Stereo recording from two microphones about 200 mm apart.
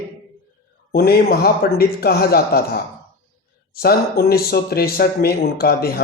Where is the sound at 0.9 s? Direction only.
50° left (ahead or behind).